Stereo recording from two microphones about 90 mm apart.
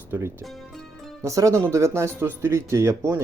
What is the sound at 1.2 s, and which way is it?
Speech, 35° right (ahead or behind).